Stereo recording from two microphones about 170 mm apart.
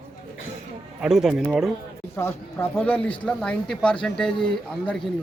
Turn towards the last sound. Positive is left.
turn(degrees=5)  # may be behind; listen again after turning